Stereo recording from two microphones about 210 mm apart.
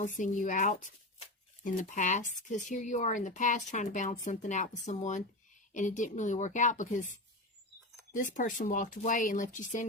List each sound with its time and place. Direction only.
0.0 s speech: 35° left (ahead or behind)
8.1 s speech: 40° left (ahead or behind)